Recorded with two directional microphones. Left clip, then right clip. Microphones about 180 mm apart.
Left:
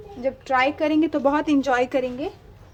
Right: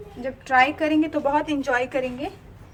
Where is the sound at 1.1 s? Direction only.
40° left (ahead or behind).